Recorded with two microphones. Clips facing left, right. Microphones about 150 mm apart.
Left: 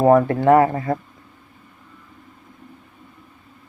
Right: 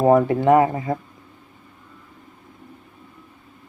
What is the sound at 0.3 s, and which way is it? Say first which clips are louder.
Speech: left 1 dB; 20° right (ahead or behind).